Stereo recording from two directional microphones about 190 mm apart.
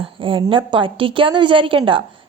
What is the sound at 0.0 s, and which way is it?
A woman's voice, 25° right (ahead or behind).